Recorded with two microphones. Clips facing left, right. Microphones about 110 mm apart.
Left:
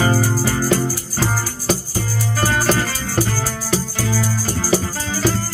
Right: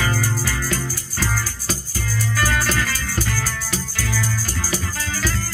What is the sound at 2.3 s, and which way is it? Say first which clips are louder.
Music: left 4 dB; 35° left (ahead or behind).